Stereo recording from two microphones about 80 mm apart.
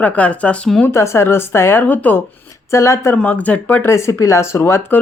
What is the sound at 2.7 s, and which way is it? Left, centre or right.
Speech, left.